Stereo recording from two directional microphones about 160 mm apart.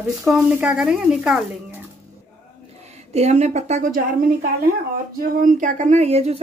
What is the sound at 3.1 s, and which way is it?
A woman's voice, 45° right (ahead or behind).